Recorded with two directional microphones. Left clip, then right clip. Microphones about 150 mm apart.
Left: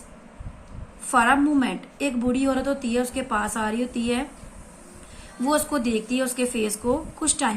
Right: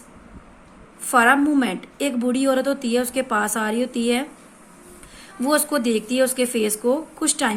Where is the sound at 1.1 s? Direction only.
55° right (ahead or behind).